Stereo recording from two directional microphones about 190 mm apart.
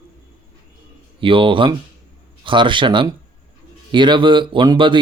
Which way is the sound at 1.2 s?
25° right (ahead or behind).